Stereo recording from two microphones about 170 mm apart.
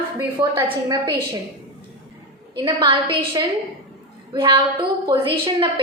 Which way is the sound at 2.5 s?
30° right (ahead or behind).